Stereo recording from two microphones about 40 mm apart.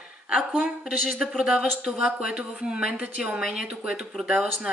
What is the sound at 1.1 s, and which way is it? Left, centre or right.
Speech, centre.